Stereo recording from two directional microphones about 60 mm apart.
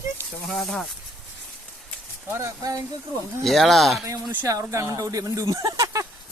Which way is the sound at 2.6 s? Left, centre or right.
Right.